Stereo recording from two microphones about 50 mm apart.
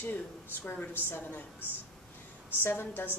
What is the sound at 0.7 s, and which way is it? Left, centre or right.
A woman's voice, left.